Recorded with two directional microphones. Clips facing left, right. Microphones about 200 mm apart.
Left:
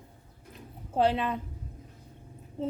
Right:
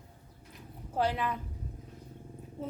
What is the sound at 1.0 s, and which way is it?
Speech, 25° left (ahead or behind).